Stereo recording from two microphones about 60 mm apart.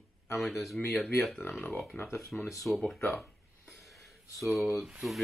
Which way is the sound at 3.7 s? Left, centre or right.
Centre.